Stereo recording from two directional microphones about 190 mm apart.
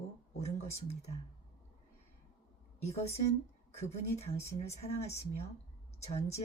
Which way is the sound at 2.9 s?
35° left (ahead or behind).